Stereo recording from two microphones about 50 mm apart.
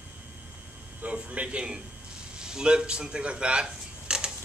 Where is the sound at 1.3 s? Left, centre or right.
Right.